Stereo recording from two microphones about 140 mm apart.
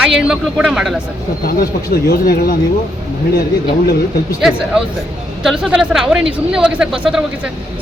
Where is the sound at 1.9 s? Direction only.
90° left.